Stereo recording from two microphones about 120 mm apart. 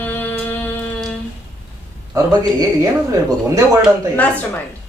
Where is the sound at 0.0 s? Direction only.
15° left (ahead or behind).